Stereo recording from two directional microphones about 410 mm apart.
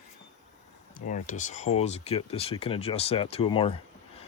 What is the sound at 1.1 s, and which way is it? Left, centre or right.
Speech, centre.